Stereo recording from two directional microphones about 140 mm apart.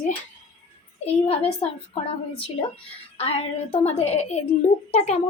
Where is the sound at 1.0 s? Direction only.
45° left (ahead or behind).